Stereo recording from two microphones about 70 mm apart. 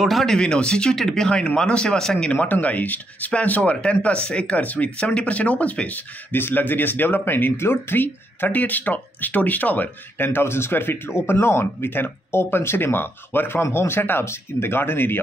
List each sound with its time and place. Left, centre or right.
0.0 s speech: centre
2.3 s speech: left